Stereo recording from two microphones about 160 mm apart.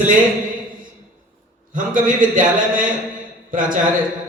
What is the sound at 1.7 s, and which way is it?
A man's voice, 55° right (ahead or behind).